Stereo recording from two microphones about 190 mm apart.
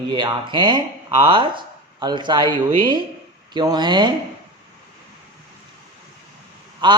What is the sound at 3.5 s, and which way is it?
Speech, 20° right (ahead or behind).